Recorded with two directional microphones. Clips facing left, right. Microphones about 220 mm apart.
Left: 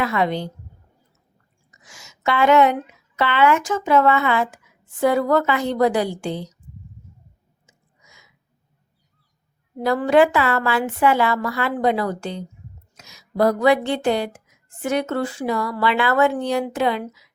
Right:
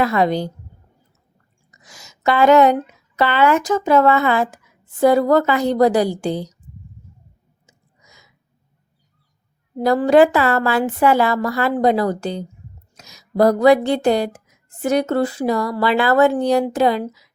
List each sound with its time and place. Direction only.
0.0 s speech: 40° right (ahead or behind)
1.7 s speech: 40° right (ahead or behind)
7.7 s a sound: 35° right (ahead or behind)
9.7 s speech: 35° right (ahead or behind)